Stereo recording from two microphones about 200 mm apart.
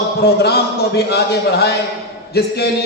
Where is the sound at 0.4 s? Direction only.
55° left (ahead or behind).